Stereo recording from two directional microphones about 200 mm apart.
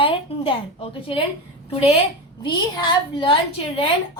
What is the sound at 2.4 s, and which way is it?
A woman's voice, 20° left (ahead or behind).